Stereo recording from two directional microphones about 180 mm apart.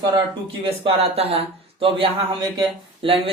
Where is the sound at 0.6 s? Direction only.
35° right (ahead or behind).